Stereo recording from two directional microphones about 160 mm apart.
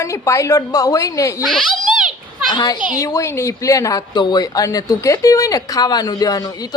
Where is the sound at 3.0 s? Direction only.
20° left (ahead or behind).